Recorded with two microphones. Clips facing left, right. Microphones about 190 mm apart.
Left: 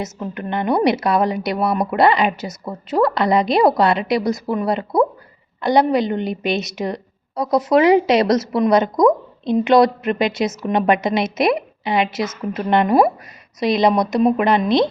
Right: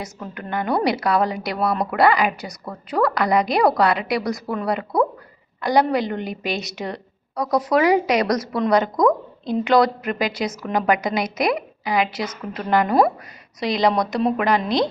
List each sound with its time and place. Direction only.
0.0 s a woman's voice: 20° left (ahead or behind)